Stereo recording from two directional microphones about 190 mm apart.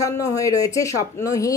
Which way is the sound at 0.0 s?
15° left (ahead or behind).